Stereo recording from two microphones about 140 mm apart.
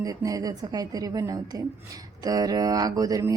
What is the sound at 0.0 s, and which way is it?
Speech, 25° right (ahead or behind).